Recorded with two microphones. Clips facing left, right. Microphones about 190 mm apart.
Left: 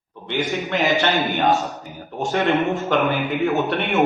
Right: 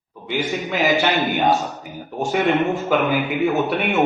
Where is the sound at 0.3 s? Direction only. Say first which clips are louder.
Even; centre (ahead or behind).